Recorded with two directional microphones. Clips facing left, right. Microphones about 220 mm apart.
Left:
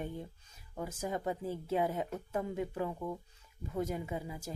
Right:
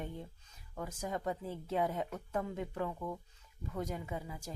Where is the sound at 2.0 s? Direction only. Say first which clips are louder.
Left 1 dB; 25° left (ahead or behind).